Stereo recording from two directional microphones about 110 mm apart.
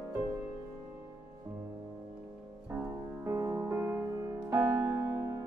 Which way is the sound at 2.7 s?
25° right (ahead or behind).